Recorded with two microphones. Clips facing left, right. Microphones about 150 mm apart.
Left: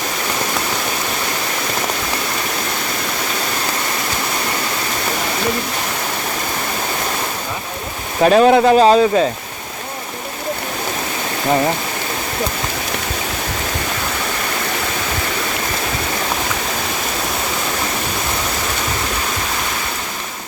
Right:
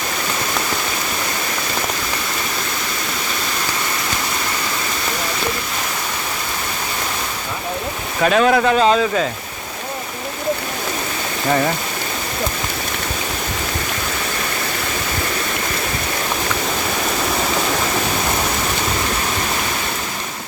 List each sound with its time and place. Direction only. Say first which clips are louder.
8.2 s speech: left 4 dB; 30° left (ahead or behind)
8.7 s speech: left 4 dB; 40° left (ahead or behind)